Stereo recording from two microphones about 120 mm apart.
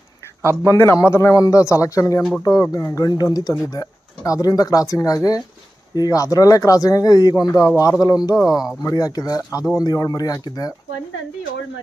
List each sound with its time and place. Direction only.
0.6 s a man's voice: 25° left (ahead or behind)
8.4 s speech: 5° right (ahead or behind)
8.8 s a man's voice: 30° left (ahead or behind)